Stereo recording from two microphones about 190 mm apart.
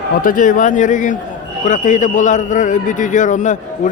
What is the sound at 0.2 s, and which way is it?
A man's voice, 45° left (ahead or behind).